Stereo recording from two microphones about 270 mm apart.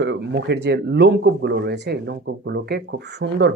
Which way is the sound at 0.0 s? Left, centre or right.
Right.